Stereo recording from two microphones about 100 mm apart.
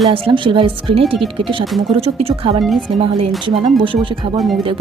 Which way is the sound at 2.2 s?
75° right (ahead or behind).